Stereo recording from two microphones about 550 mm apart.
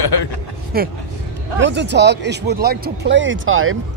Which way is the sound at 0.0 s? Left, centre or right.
Left.